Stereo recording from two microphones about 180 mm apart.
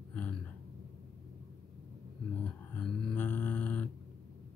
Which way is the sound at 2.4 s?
10° left (ahead or behind).